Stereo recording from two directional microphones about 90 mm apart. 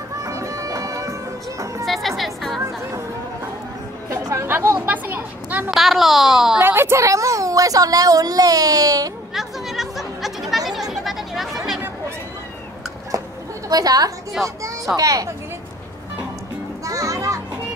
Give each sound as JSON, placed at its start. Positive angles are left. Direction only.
{"t": 0.2, "sound": "music", "side_deg": -35}
{"t": 1.9, "sound": "music", "side_deg": 0}
{"t": 4.1, "sound": "chatter", "side_deg": -40}
{"t": 4.5, "sound": "chatter", "side_deg": -25}
{"t": 4.8, "sound": "a sound", "side_deg": -20}
{"t": 5.7, "sound": "a woman's voice", "side_deg": 0}
{"t": 6.6, "sound": "a woman's voice", "side_deg": -25}
{"t": 9.3, "sound": "chatter", "side_deg": -5}
{"t": 13.1, "sound": "a sound", "side_deg": -40}
{"t": 13.7, "sound": "a woman's voice", "side_deg": -45}
{"t": 16.8, "sound": "music", "side_deg": -40}